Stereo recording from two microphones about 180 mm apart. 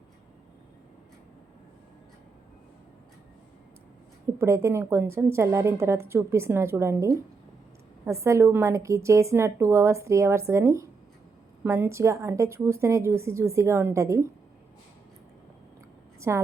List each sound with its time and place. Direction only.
4.4 s a woman's voice: 15° right (ahead or behind)
16.3 s a woman's voice: 15° right (ahead or behind)